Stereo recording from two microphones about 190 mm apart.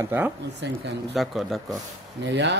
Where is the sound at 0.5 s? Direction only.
65° right (ahead or behind).